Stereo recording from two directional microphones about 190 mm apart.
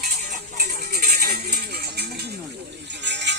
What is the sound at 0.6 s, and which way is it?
Music, 50° right (ahead or behind).